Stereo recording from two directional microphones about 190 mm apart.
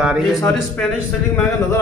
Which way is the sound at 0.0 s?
5° right (ahead or behind).